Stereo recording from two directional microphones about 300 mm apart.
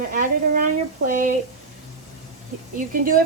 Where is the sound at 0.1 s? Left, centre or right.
Right.